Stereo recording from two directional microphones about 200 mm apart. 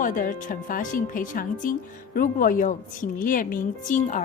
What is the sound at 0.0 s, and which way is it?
A woman's voice, 40° left (ahead or behind).